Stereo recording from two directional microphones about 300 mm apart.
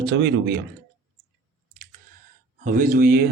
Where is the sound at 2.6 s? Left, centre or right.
Right.